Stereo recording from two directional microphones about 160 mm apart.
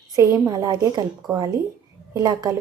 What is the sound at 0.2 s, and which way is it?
Speech, 20° right (ahead or behind).